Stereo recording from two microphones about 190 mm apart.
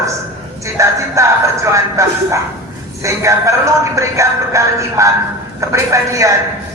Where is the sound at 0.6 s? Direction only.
15° right (ahead or behind).